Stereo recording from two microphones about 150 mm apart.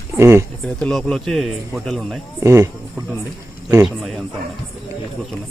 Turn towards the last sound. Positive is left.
turn(degrees=0)  # may be behind; listen again after turning